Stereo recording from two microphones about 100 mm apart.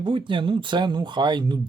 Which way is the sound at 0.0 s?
55° right (ahead or behind).